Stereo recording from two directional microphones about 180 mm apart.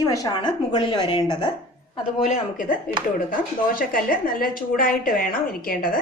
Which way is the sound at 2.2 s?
50° left (ahead or behind).